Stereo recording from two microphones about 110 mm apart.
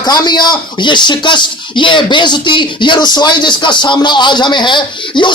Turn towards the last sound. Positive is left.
turn(degrees=45)  # may be behind; listen again after turning